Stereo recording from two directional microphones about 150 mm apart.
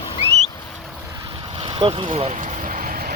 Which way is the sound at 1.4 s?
40° right (ahead or behind).